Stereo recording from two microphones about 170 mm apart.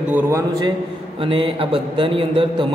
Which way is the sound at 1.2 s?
30° right (ahead or behind).